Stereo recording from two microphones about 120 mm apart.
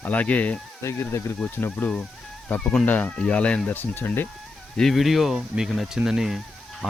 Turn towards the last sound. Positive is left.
turn(degrees=-5)  # may be behind; listen again after turning